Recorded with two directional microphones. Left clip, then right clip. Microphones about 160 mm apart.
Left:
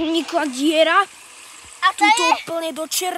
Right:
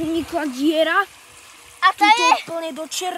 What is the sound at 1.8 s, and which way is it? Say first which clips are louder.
Speech: right 1 dB; 70° right (ahead or behind).